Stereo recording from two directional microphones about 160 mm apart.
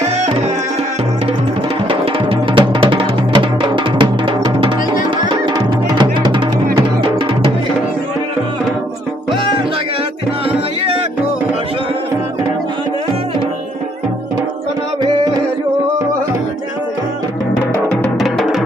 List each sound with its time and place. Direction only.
1.9 s music: 35° right (ahead or behind)
10.5 s music: 35° right (ahead or behind)
15.0 s music: 25° right (ahead or behind)
18.0 s music: centre (ahead or behind)